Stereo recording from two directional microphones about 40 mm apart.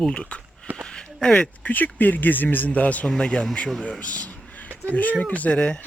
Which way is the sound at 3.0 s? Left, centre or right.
Left.